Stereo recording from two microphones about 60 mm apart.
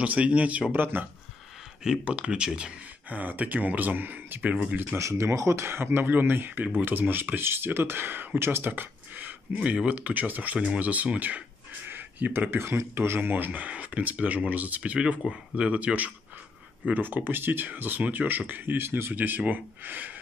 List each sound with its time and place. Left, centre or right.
0.0 s speech: right
1.8 s speech: centre
4.9 s speech: right
19.1 s speech: right